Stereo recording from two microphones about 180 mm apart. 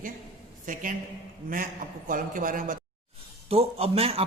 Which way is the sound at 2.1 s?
50° right (ahead or behind).